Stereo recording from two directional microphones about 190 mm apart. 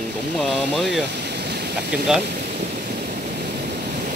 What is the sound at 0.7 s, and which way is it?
Speech, centre (ahead or behind).